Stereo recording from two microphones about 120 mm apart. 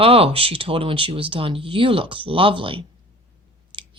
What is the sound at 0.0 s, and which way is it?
Speech, 55° right (ahead or behind).